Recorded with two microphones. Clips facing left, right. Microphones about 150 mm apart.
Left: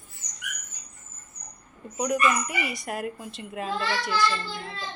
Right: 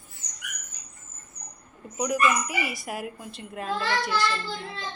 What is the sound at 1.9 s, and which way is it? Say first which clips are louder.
Speech: even; centre (ahead or behind).